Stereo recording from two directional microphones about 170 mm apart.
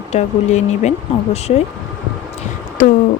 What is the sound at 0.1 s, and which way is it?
Speech, 45° left (ahead or behind).